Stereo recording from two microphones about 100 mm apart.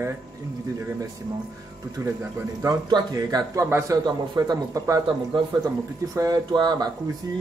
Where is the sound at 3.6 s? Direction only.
25° right (ahead or behind).